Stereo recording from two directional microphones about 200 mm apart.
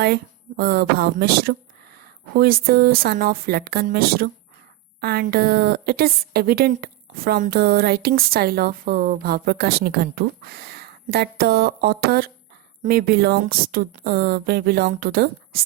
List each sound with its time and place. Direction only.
0.0 s a woman's voice: 50° right (ahead or behind)